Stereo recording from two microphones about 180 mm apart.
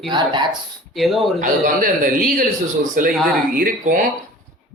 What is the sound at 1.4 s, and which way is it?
Speech, 50° right (ahead or behind).